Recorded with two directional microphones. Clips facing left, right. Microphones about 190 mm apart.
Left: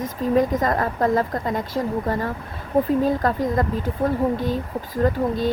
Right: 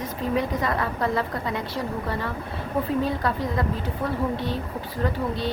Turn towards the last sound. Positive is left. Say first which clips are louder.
# left 6 dB
turn(degrees=45)  # may be behind; listen again after turning